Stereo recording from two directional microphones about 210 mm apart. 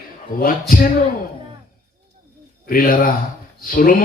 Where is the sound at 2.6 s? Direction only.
45° left (ahead or behind).